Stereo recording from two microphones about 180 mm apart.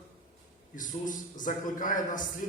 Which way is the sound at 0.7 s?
45° left (ahead or behind).